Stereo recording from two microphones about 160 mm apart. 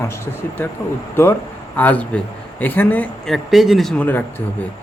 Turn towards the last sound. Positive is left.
turn(degrees=10)  # may be behind; listen again after turning